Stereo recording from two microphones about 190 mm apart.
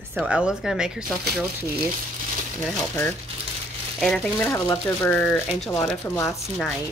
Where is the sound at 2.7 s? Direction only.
Centre (ahead or behind).